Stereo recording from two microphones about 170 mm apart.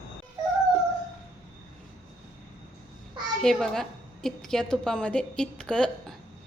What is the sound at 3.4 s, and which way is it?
A woman's voice, centre (ahead or behind).